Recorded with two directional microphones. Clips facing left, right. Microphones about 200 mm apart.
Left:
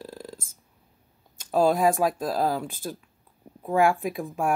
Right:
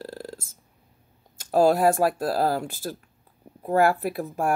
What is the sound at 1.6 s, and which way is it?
Speech, 5° right (ahead or behind).